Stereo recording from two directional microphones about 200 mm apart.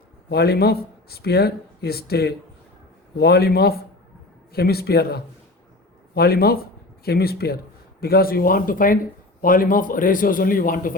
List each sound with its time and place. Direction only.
0.3 s speech: 55° left (ahead or behind)